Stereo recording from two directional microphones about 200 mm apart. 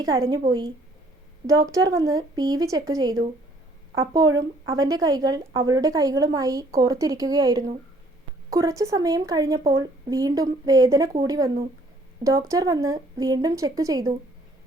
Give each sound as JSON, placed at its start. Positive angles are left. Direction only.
{"t": 0.0, "sound": "a woman's voice", "side_deg": -15}
{"t": 4.7, "sound": "a woman's voice", "side_deg": -20}